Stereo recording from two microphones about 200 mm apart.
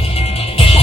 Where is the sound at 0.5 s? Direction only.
30° left (ahead or behind).